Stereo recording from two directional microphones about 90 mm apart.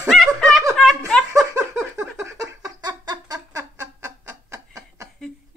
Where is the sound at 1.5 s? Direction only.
30° right (ahead or behind); by 3.6 s 50° right (ahead or behind).